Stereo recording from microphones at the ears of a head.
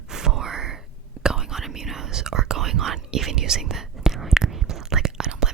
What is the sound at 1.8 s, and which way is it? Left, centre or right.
Whispering, right.